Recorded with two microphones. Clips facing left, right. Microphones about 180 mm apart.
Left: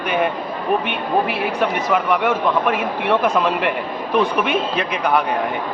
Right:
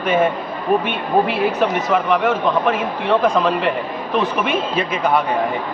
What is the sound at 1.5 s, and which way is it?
Speech, centre (ahead or behind).